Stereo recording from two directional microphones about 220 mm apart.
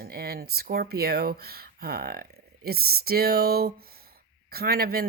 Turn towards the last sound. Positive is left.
turn(degrees=-45)  # may be behind; listen again after turning